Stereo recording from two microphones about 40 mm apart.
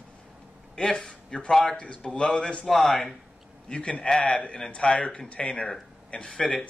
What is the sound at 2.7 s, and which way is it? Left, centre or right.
Speech, centre.